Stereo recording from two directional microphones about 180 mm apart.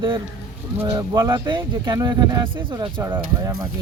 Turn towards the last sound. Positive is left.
turn(degrees=-20)  # may be behind; listen again after turning